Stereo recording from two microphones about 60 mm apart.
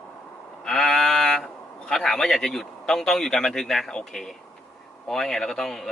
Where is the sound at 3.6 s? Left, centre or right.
Centre.